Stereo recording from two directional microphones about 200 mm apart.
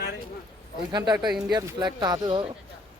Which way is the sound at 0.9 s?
20° right (ahead or behind).